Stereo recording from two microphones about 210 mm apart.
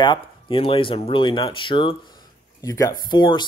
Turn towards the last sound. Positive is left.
turn(degrees=20)  # may be behind; listen again after turning